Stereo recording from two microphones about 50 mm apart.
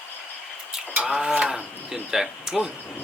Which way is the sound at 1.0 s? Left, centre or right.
Centre.